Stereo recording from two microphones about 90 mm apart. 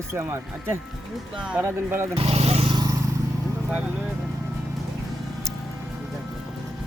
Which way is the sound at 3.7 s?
15° right (ahead or behind).